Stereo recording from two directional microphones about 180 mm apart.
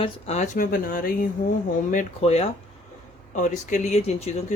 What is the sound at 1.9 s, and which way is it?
Speech, 35° left (ahead or behind).